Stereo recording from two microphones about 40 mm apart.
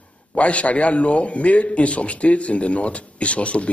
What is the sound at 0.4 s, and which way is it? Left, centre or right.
A man's voice, left.